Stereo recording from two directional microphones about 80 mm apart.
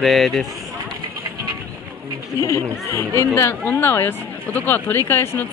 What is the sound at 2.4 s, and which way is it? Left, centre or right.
Speech, left.